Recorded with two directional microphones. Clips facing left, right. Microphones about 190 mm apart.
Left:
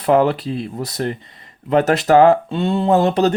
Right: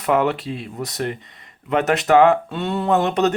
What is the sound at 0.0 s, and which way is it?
Speech, 35° left (ahead or behind).